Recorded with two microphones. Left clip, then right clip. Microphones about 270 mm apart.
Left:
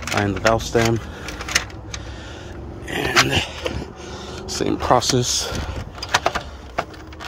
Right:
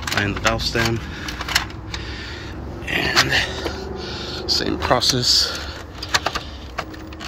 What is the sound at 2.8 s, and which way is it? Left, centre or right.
Dog, left.